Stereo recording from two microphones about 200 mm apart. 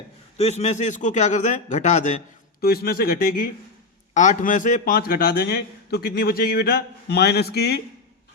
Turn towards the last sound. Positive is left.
turn(degrees=55)  # may be behind; listen again after turning